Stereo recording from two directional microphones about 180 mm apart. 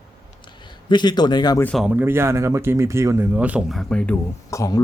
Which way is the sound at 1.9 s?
10° right (ahead or behind).